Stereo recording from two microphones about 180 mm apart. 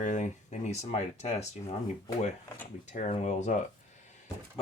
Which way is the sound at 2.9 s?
40° left (ahead or behind).